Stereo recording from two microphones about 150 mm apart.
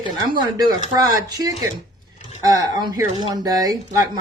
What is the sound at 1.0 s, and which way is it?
Speech, 25° right (ahead or behind).